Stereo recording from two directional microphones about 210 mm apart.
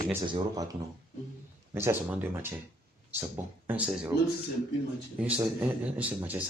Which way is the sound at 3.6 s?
5° right (ahead or behind).